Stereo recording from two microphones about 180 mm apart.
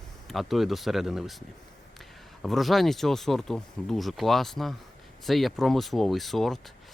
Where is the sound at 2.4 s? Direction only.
Centre (ahead or behind).